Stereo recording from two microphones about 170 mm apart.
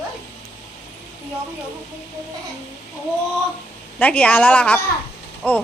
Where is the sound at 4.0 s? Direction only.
10° left (ahead or behind).